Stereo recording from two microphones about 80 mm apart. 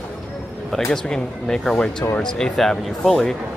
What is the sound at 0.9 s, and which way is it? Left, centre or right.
A man's voice, centre.